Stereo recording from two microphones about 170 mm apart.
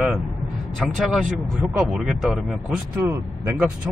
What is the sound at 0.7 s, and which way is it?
Speech, centre (ahead or behind).